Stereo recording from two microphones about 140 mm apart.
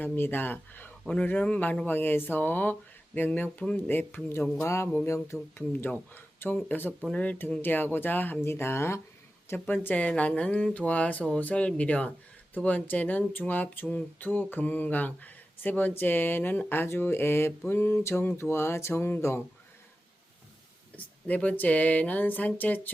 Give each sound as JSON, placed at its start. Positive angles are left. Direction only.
{"t": 0.0, "sound": "speech", "side_deg": 15}
{"t": 20.9, "sound": "speech", "side_deg": 10}